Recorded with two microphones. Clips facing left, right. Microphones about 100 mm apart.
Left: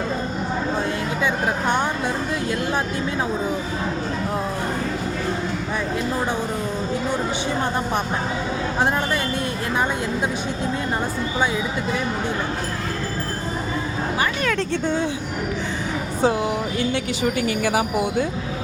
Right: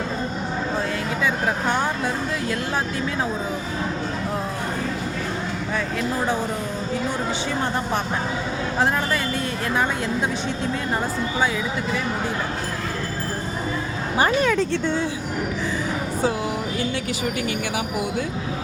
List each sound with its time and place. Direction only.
1.2 s vehicle: 20° left (ahead or behind)
16.2 s a woman's voice: 25° left (ahead or behind)
17.3 s speech: 35° left (ahead or behind)